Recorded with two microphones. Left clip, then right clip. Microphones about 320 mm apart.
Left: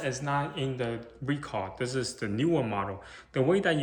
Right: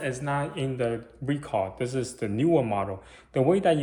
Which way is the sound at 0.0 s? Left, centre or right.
Centre.